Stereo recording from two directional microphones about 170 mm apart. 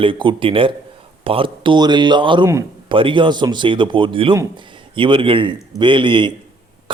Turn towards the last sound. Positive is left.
turn(degrees=-30)  # may be behind; listen again after turning